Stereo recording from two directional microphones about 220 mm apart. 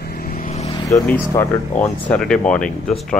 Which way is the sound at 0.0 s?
40° left (ahead or behind).